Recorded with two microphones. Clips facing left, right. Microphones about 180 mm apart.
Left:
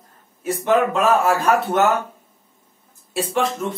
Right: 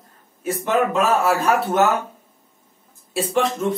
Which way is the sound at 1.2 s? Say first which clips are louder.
Left 1 dB; centre (ahead or behind).